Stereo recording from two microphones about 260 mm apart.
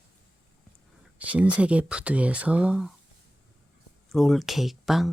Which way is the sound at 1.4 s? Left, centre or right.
Centre.